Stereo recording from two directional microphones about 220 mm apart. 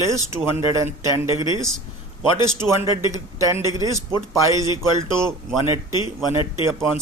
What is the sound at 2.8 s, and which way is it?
Speech, 15° right (ahead or behind).